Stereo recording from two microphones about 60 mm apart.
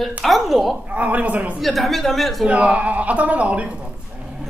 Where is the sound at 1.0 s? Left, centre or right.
Right.